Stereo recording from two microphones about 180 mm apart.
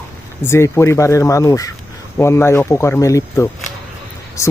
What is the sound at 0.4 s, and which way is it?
Speech, 15° left (ahead or behind).